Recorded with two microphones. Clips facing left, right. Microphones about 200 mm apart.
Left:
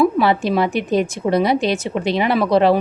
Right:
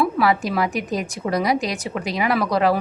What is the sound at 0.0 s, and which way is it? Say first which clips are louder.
A woman's voice: left 4 dB; 25° left (ahead or behind).